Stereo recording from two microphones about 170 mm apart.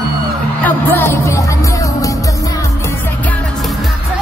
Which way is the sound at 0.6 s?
10° left (ahead or behind).